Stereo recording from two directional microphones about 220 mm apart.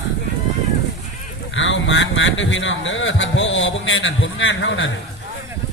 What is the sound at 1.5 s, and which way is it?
Speech, 60° left (ahead or behind).